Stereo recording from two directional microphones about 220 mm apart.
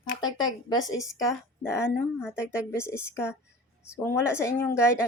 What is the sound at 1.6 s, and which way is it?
A woman's voice, 10° left (ahead or behind).